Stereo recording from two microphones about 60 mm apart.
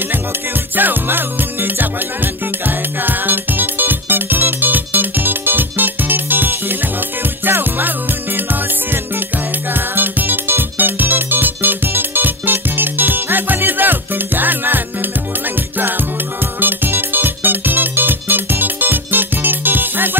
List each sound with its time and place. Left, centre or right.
0.7 s music: right
9.8 s music: right
16.5 s music: right